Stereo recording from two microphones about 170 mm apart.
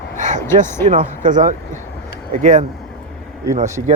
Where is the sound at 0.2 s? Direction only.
45° right (ahead or behind).